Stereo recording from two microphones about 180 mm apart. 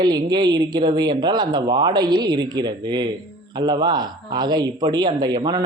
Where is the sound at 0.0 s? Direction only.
25° right (ahead or behind).